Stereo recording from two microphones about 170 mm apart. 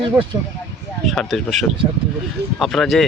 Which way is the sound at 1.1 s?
Centre (ahead or behind).